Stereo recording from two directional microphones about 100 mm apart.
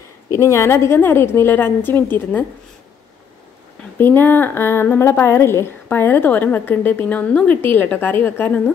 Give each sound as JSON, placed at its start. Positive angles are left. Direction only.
{"t": 0.4, "sound": "a woman's voice", "side_deg": 30}
{"t": 4.0, "sound": "a woman's voice", "side_deg": 20}